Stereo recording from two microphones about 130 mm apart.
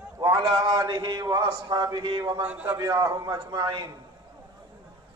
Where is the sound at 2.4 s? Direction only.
10° right (ahead or behind).